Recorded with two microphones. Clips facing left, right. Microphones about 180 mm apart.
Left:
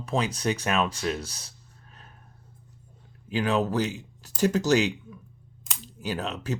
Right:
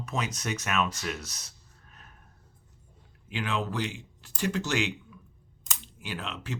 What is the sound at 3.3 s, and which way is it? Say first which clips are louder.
Speech: left 7 dB; 40° left (ahead or behind).